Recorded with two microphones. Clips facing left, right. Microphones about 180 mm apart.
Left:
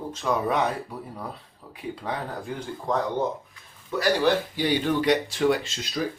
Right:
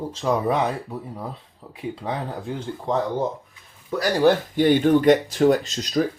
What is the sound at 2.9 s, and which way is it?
Speech, 25° right (ahead or behind).